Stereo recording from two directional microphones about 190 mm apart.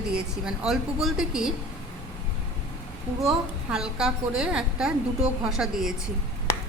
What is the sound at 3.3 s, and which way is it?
A woman's voice, 5° right (ahead or behind).